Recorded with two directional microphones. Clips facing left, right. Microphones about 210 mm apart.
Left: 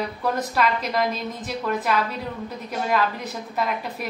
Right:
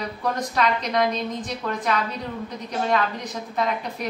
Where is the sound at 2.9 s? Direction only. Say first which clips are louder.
Left 1 dB; 5° left (ahead or behind).